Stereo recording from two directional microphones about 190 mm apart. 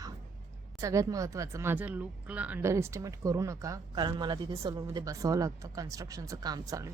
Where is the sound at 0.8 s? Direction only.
15° right (ahead or behind).